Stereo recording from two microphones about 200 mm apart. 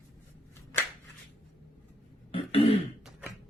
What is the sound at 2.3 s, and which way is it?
Throat clearing, 30° left (ahead or behind).